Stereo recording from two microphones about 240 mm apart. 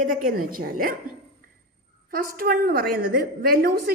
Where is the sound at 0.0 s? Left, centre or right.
Right.